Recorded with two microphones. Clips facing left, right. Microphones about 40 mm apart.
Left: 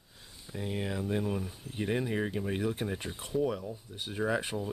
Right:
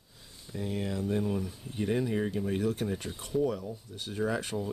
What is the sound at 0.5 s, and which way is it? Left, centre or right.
Speech, centre.